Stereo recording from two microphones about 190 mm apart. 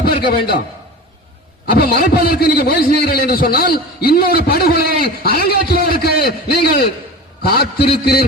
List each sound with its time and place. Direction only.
0.0 s a man's voice: 55° left (ahead or behind)
1.7 s a man's voice: 55° left (ahead or behind)